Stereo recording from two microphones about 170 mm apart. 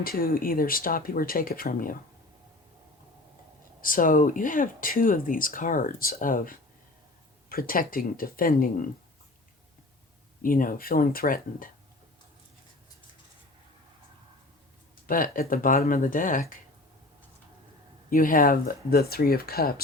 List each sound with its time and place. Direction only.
0.0 s speech: 60° left (ahead or behind)
3.8 s speech: 55° left (ahead or behind)
10.4 s speech: 55° left (ahead or behind)
15.0 s speech: 55° left (ahead or behind)
18.1 s speech: 55° left (ahead or behind)